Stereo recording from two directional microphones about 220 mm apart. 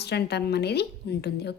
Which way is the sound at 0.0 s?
50° left (ahead or behind).